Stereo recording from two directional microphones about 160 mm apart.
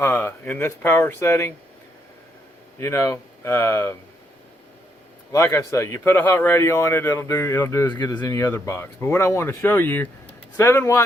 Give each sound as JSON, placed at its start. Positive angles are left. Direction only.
{"t": 0.0, "sound": "speech", "side_deg": 10}
{"t": 2.7, "sound": "speech", "side_deg": 15}
{"t": 5.3, "sound": "speech", "side_deg": 20}